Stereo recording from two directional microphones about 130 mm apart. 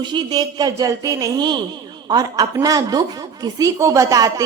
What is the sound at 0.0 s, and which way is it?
Speech, 35° right (ahead or behind).